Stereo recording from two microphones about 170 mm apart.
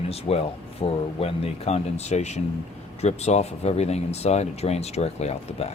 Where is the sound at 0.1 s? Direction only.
35° left (ahead or behind).